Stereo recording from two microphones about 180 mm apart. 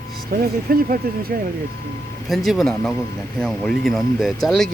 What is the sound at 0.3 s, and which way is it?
Speech, 55° right (ahead or behind).